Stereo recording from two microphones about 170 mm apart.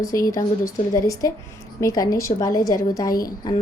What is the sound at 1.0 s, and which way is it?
A woman's voice, 20° left (ahead or behind).